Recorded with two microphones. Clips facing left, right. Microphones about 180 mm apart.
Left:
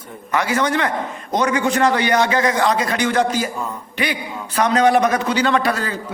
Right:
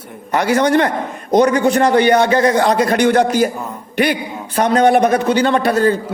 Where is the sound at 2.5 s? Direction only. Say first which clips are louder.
Right 5 dB; 60° right (ahead or behind).